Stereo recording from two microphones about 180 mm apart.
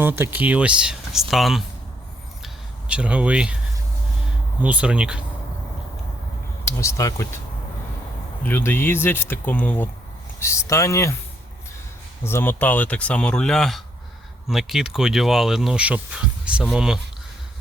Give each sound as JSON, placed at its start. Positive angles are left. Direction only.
{"t": 0.0, "sound": "speech", "side_deg": -10}
{"t": 2.9, "sound": "speech", "side_deg": -5}
{"t": 4.6, "sound": "speech", "side_deg": -5}
{"t": 6.7, "sound": "speech", "side_deg": 15}
{"t": 8.4, "sound": "speech", "side_deg": 10}
{"t": 12.2, "sound": "speech", "side_deg": 10}